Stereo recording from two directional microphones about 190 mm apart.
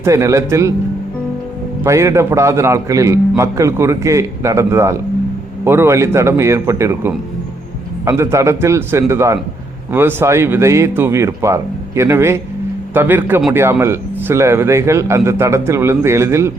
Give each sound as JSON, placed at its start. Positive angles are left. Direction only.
{"t": 0.0, "sound": "a man's voice", "side_deg": -15}
{"t": 1.8, "sound": "a man's voice", "side_deg": -15}